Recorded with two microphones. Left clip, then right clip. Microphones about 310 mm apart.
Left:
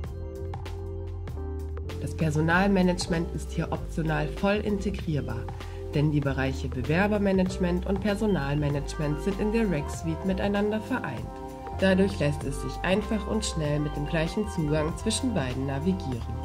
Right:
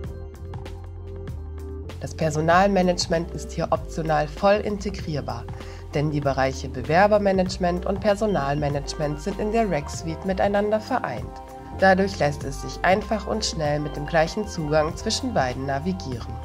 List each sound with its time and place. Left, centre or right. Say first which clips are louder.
2.1 s speech: right 7 dB; centre